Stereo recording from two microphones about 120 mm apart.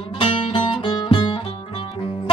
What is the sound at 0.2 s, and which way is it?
Music, 45° left (ahead or behind).